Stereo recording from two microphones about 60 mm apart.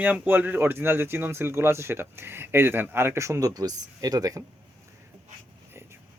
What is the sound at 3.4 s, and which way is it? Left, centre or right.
Speech, right.